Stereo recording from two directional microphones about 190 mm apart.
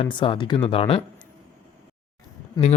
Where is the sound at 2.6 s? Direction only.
20° left (ahead or behind).